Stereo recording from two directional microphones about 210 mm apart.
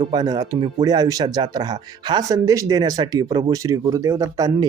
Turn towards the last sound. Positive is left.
turn(degrees=-15)  # may be behind; listen again after turning